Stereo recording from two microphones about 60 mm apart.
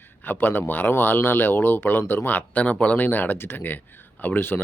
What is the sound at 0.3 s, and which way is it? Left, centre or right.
Speech, left.